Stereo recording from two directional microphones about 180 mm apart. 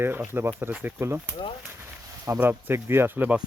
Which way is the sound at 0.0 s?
10° right (ahead or behind).